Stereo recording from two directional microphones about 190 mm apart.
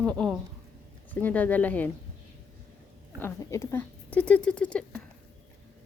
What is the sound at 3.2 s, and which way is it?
Speech, 15° left (ahead or behind).